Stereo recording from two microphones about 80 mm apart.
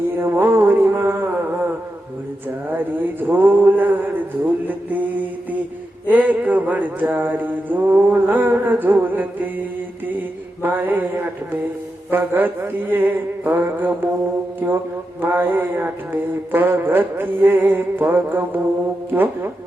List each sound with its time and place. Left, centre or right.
0.2 s mantra: right
2.7 s mantra: right
10.6 s mantra: right
12.1 s music: right
15.2 s music: right